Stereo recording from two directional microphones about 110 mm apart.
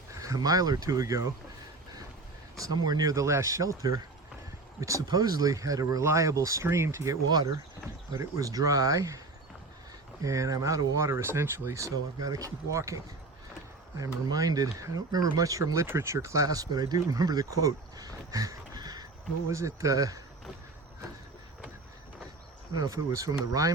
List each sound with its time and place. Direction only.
0.1 s speech: 30° right (ahead or behind)
2.6 s speech: 35° right (ahead or behind)
7.3 s speech: 40° right (ahead or behind)
10.2 s speech: 30° right (ahead or behind)
14.0 s speech: 30° right (ahead or behind)
22.8 s speech: 30° right (ahead or behind)